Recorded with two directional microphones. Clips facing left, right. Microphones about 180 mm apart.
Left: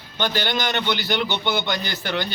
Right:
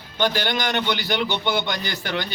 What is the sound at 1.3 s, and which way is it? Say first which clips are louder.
Speech: right 1 dB; 15° right (ahead or behind).